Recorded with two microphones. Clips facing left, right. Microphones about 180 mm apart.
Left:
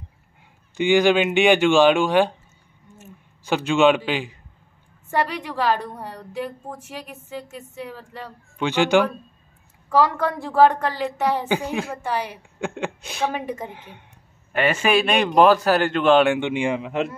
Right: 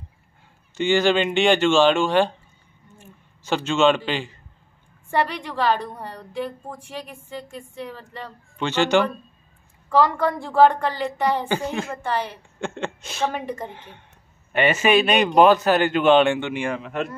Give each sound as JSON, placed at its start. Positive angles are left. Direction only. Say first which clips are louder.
{"t": 0.7, "sound": "a woman's voice", "louder": "left 2 dB", "side_deg": 10}
{"t": 3.0, "sound": "a sound", "louder": "left 4 dB", "side_deg": 10}
{"t": 5.1, "sound": "a woman's voice", "louder": "even", "side_deg": 5}
{"t": 14.5, "sound": "speech", "louder": "right 1 dB", "side_deg": 0}
{"t": 16.3, "sound": "a woman's voice", "louder": "left 3 dB", "side_deg": 15}